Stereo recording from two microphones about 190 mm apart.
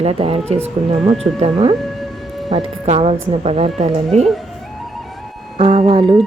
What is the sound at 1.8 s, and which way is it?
Music, centre (ahead or behind).